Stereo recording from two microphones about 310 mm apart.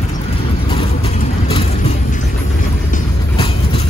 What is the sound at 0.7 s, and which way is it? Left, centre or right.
Vehicle, centre.